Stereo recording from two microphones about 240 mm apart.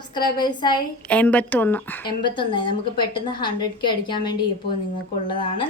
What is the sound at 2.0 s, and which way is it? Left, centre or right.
A woman's voice, centre.